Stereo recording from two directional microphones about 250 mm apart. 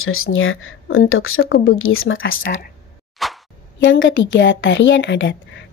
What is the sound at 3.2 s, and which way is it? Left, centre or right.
Plop, centre.